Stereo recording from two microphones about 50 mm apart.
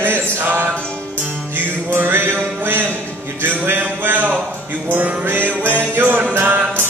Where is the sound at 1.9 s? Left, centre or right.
Right.